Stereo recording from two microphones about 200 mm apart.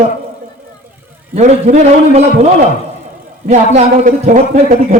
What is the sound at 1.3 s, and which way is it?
Speech, 35° right (ahead or behind).